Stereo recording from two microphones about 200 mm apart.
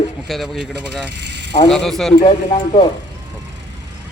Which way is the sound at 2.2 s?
30° left (ahead or behind).